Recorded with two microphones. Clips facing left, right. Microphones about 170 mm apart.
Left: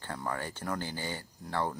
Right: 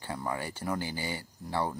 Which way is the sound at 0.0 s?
10° right (ahead or behind).